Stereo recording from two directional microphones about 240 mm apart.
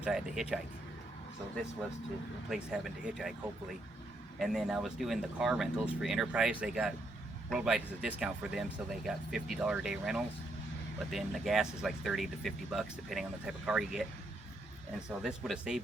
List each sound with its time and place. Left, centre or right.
0.0 s speech: centre
2.5 s speech: centre
4.4 s speech: centre
15.2 s speech: centre